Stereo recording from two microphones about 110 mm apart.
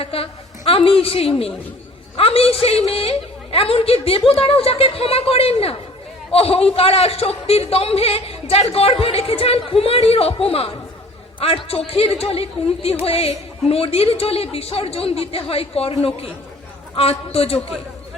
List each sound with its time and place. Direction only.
0.0 s a woman's voice: 60° left (ahead or behind)